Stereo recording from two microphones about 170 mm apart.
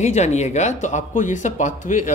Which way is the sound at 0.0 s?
40° left (ahead or behind).